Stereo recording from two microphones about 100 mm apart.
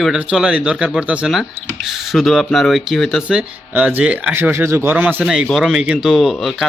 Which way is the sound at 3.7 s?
15° right (ahead or behind).